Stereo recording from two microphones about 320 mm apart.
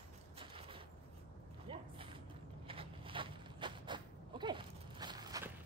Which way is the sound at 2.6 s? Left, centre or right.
Centre.